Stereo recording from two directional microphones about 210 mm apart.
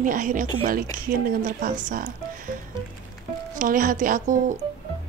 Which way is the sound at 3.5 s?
40° right (ahead or behind).